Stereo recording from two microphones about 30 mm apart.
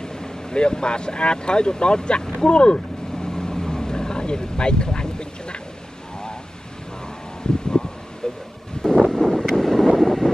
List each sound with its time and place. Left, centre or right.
0.0 s speech: left
3.2 s vehicle: left
7.5 s wind: left
8.2 s vehicle: left
8.8 s wind: left
9.1 s vehicle: centre